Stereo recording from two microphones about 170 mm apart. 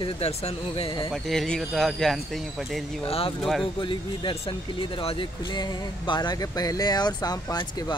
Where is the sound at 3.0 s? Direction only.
35° left (ahead or behind).